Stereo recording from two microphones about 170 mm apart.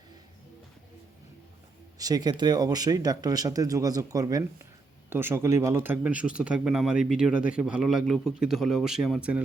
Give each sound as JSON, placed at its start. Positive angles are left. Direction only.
{"t": 2.0, "sound": "a man's voice", "side_deg": -20}